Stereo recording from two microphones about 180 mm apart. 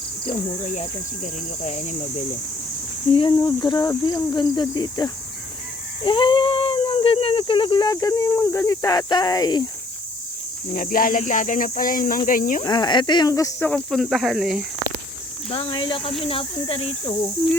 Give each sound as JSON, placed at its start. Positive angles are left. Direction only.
{"t": 0.3, "sound": "speech", "side_deg": 40}
{"t": 3.1, "sound": "speech", "side_deg": 25}
{"t": 10.8, "sound": "speech", "side_deg": 50}
{"t": 12.6, "sound": "speech", "side_deg": 25}
{"t": 13.7, "sound": "speech", "side_deg": 5}
{"t": 15.4, "sound": "speech", "side_deg": 30}